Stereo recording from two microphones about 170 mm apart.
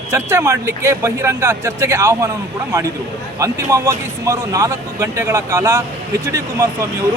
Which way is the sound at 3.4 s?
15° right (ahead or behind).